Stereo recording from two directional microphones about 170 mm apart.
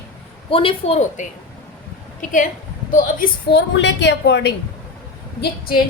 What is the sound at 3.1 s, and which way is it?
A woman's voice, 70° left (ahead or behind).